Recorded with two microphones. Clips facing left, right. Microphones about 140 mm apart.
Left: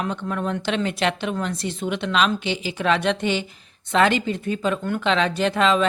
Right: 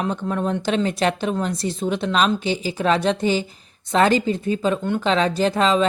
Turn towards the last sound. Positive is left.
turn(degrees=-35)  # may be behind; listen again after turning